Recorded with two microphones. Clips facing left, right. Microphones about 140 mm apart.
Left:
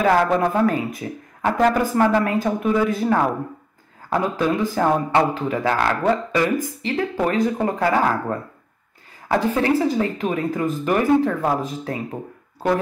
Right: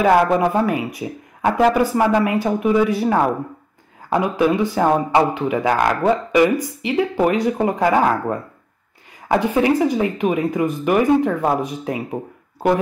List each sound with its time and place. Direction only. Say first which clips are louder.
0.0 s speech: right 3 dB; 10° right (ahead or behind)
9.5 s speech: right 2 dB; 15° right (ahead or behind)